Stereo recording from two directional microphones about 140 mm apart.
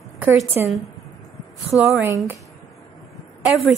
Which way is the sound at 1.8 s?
15° right (ahead or behind).